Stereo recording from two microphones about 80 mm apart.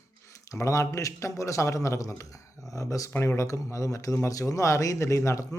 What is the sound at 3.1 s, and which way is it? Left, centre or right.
Speech, left.